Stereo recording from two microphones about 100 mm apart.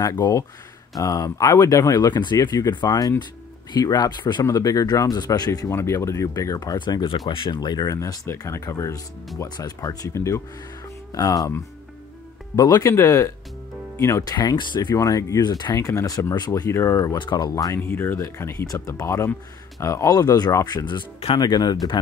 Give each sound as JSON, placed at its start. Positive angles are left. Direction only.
{"t": 0.0, "sound": "speech", "side_deg": 35}
{"t": 5.5, "sound": "speech", "side_deg": 30}
{"t": 6.8, "sound": "speech", "side_deg": 50}
{"t": 17.2, "sound": "speech", "side_deg": 45}
{"t": 17.8, "sound": "speech", "side_deg": 25}